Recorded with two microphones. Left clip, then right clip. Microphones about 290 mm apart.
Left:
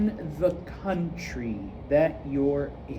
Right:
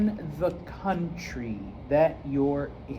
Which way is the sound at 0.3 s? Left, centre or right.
Centre.